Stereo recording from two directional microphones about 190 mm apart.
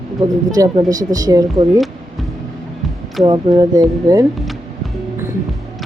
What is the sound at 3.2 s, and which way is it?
Speech, 20° right (ahead or behind).